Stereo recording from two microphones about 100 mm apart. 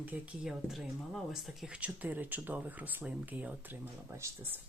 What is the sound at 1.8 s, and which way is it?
Speech, 15° right (ahead or behind).